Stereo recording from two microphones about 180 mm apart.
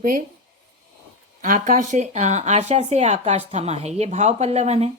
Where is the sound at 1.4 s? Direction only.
45° right (ahead or behind).